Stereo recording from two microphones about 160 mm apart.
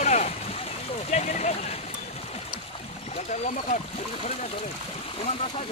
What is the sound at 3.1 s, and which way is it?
Speech, 45° left (ahead or behind).